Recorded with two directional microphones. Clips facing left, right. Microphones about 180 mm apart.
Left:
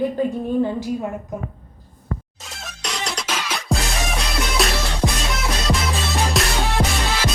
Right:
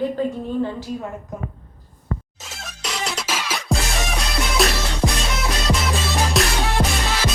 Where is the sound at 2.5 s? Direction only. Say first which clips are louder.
Even; centre (ahead or behind).